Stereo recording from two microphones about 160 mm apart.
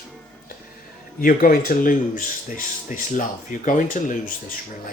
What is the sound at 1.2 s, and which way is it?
Speech, 60° left (ahead or behind).